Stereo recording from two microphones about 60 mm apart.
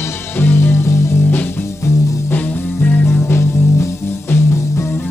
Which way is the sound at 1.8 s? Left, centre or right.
Left.